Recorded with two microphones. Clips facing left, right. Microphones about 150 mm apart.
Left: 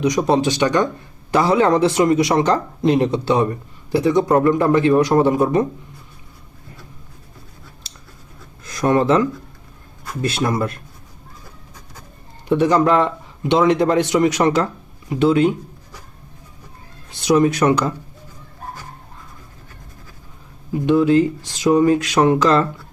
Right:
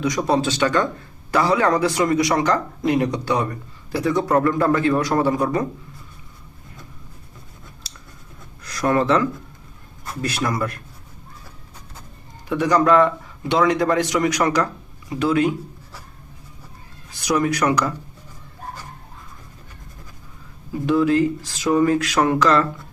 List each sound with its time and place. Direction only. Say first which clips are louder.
0.0 s speech: left 3 dB; 20° left (ahead or behind)
8.6 s speech: left 3 dB; 20° left (ahead or behind)
12.5 s speech: left 2 dB; 25° left (ahead or behind)
17.1 s speech: left 5 dB; 25° left (ahead or behind)
20.8 s speech: left 3 dB; 20° left (ahead or behind)